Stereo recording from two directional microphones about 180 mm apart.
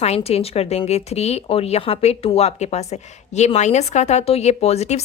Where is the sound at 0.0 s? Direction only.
35° left (ahead or behind).